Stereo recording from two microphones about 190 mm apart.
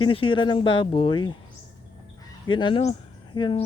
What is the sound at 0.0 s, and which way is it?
Speech, 25° left (ahead or behind).